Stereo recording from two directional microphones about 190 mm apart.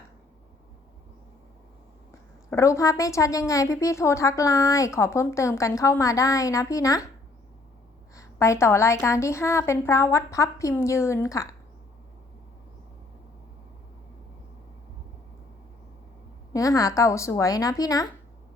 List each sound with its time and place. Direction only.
2.5 s a woman's voice: 15° left (ahead or behind)
8.1 s a woman's voice: 15° left (ahead or behind)
16.5 s a woman's voice: 15° left (ahead or behind)